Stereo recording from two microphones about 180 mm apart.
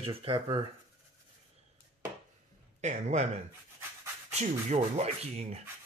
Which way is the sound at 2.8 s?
40° right (ahead or behind).